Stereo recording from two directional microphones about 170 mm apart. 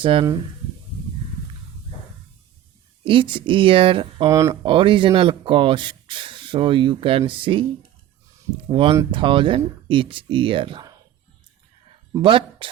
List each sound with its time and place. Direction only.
0.0 s speech: 30° right (ahead or behind)
3.0 s speech: 30° right (ahead or behind)
4.3 s speech: 20° right (ahead or behind)
4.6 s speech: 30° right (ahead or behind)
8.6 s speech: 30° right (ahead or behind)
12.2 s speech: 30° right (ahead or behind)